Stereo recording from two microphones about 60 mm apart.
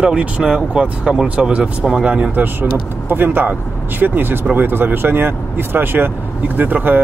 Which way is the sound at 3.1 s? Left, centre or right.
Right.